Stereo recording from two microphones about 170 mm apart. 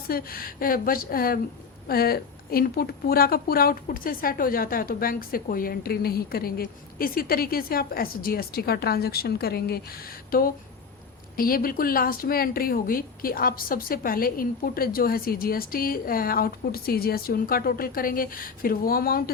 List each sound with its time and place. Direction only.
0.1 s a woman's voice: 60° left (ahead or behind)